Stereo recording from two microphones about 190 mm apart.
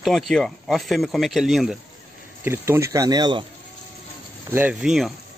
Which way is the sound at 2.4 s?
15° right (ahead or behind).